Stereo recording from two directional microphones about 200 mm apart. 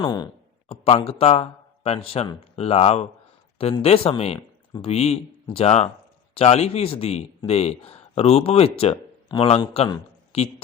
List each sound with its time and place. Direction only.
0.0 s speech: 20° left (ahead or behind)